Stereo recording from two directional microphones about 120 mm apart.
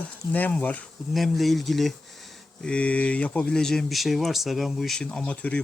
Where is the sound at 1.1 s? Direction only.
Centre (ahead or behind).